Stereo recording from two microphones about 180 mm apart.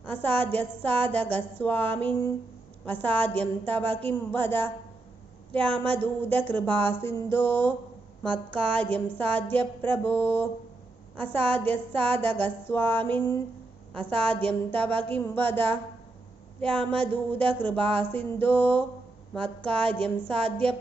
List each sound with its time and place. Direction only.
0.1 s a woman's voice: 10° left (ahead or behind)